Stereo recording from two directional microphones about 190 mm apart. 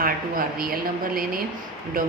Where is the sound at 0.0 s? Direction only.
50° right (ahead or behind).